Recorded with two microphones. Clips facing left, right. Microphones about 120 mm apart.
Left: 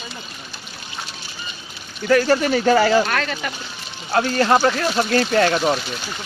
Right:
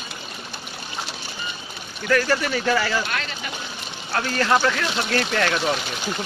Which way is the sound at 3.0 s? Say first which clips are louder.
Left 7 dB; 55° left (ahead or behind).